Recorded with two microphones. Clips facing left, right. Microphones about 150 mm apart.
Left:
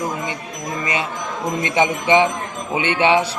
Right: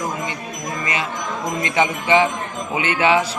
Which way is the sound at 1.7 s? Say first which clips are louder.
Left 1 dB; 20° left (ahead or behind).